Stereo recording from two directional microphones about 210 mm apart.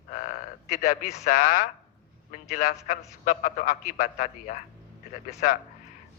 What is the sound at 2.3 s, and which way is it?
A man's voice, 40° left (ahead or behind).